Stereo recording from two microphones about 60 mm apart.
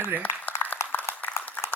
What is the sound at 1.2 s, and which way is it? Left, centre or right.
Applause, left.